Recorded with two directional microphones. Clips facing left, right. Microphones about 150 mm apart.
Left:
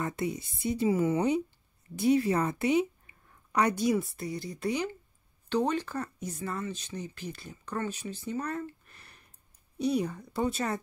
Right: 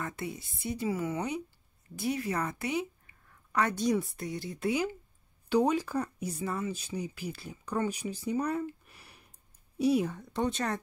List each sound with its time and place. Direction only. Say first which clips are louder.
0.0 s a woman's voice: left 5 dB; 20° left (ahead or behind); by 10.8 s 5° left (ahead or behind)